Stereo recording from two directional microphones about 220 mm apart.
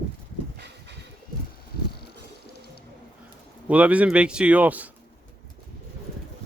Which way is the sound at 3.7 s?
5° right (ahead or behind).